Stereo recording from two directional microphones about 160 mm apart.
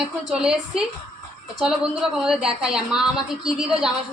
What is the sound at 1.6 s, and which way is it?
A woman's voice, 5° right (ahead or behind).